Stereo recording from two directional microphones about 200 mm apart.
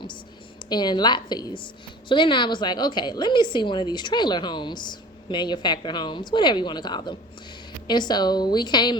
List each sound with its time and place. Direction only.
0.7 s a woman's voice: 20° left (ahead or behind)